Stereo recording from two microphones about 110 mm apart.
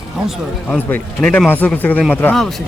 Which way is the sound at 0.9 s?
15° left (ahead or behind).